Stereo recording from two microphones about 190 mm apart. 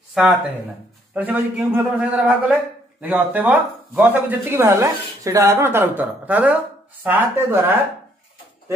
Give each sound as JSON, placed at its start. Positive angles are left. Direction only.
{"t": 0.2, "sound": "speech", "side_deg": -5}